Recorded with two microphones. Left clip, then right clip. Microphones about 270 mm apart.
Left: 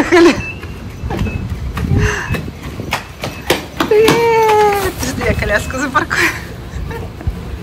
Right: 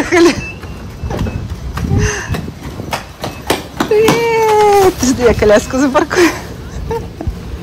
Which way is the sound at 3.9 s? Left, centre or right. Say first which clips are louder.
Left 1 dB; centre.